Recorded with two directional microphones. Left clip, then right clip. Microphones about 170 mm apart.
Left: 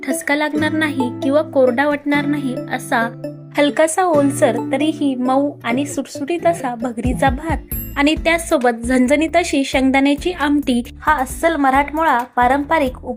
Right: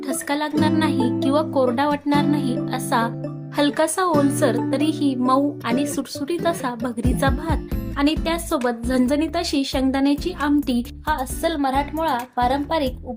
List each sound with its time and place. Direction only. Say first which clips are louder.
0.1 s a woman's voice: left 6 dB; 15° left (ahead or behind); by 7.6 s centre (ahead or behind)
7.9 s a woman's voice: left 6 dB; 15° left (ahead or behind)